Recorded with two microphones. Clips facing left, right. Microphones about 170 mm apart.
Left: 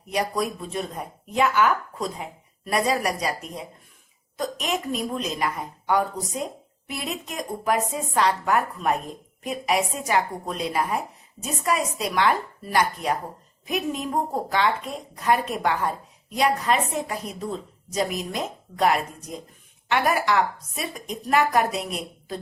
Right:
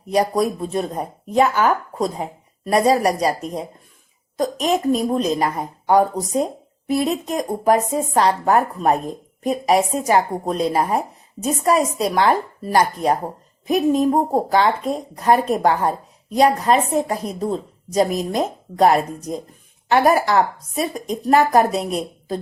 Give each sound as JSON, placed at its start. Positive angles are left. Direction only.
{"t": 0.1, "sound": "speech", "side_deg": -40}